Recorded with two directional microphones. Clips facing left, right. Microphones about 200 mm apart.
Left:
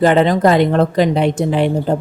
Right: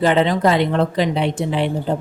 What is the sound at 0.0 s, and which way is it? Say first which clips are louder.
Speech: left 4 dB; 45° left (ahead or behind).